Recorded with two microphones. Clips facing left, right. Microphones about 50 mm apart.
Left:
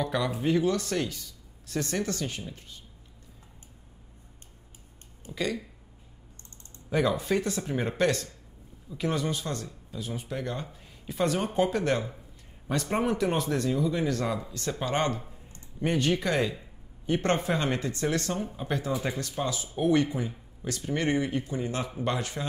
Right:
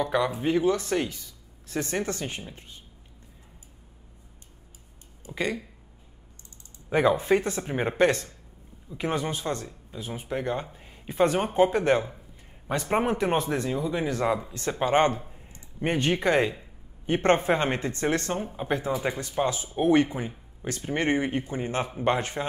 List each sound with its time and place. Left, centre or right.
0.0 s speech: centre
5.2 s speech: right
6.9 s speech: right